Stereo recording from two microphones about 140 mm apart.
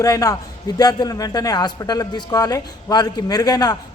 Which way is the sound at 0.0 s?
25° left (ahead or behind).